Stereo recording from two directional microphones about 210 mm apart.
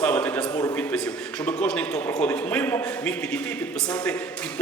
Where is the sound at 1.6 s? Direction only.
5° left (ahead or behind).